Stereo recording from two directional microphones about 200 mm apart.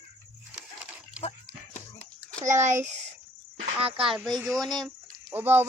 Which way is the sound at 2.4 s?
35° right (ahead or behind).